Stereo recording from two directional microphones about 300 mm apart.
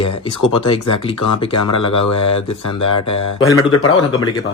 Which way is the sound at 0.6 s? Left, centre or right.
Centre.